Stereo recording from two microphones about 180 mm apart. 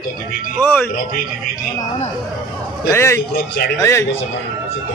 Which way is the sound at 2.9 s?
15° left (ahead or behind).